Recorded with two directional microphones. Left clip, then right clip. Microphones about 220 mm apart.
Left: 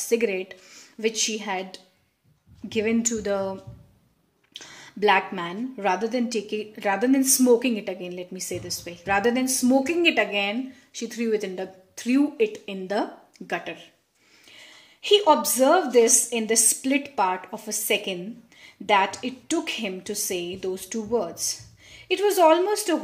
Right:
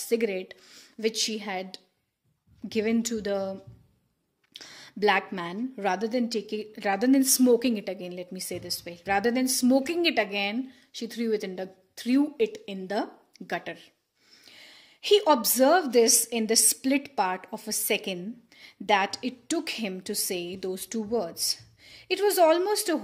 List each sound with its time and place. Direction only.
0.0 s a woman's voice: 30° right (ahead or behind)
4.6 s a woman's voice: 35° right (ahead or behind)